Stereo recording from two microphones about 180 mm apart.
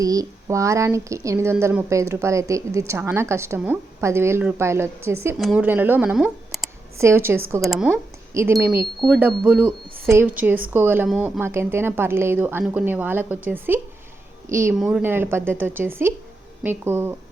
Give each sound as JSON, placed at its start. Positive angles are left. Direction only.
{"t": 0.0, "sound": "speech", "side_deg": -20}
{"t": 7.0, "sound": "speech", "side_deg": -15}
{"t": 7.6, "sound": "speech", "side_deg": 0}
{"t": 8.3, "sound": "speech", "side_deg": -15}
{"t": 9.0, "sound": "speech", "side_deg": -5}
{"t": 14.8, "sound": "speech", "side_deg": -5}